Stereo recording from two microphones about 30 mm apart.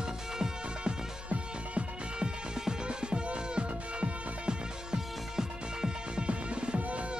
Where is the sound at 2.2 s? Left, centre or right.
Right.